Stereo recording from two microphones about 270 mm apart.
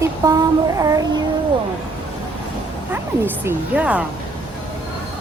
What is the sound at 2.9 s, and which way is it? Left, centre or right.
Speech, centre.